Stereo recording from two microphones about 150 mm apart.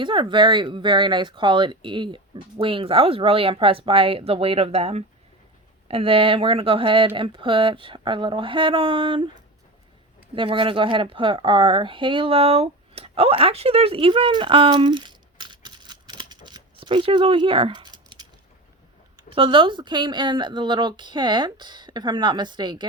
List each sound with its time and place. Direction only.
0.0 s speech: 35° right (ahead or behind)
10.3 s speech: 35° right (ahead or behind)